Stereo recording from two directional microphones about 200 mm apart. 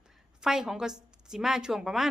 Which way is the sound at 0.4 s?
Centre (ahead or behind).